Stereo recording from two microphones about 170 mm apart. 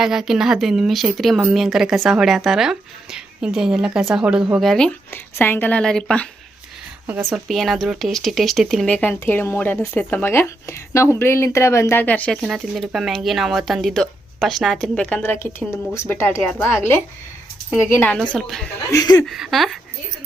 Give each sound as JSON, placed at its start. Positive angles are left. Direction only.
{"t": 0.0, "sound": "speech", "side_deg": 0}
{"t": 7.3, "sound": "speech", "side_deg": 0}
{"t": 18.3, "sound": "speech", "side_deg": 0}
{"t": 18.9, "sound": "chuckle", "side_deg": 20}
{"t": 19.2, "sound": "speech", "side_deg": 0}